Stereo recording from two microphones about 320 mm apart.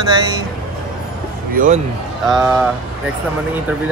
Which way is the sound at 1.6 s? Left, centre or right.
Right.